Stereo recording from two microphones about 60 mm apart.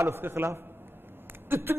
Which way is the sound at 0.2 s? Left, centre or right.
Right.